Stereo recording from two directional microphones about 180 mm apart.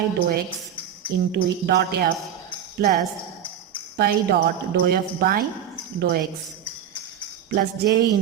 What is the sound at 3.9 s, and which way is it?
Speech, 60° right (ahead or behind).